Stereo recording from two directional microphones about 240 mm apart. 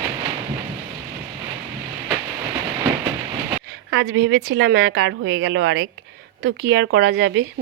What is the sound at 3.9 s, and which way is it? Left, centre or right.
A woman's voice, right.